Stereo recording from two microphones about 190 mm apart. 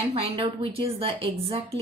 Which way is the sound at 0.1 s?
30° right (ahead or behind).